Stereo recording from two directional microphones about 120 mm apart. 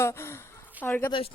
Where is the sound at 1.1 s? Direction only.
50° left (ahead or behind).